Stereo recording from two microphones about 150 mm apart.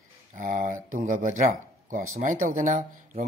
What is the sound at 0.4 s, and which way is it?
Speech, 65° right (ahead or behind).